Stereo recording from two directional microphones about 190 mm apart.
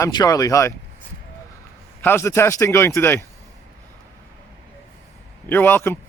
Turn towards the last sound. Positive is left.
turn(degrees=10)  # may be behind; listen again after turning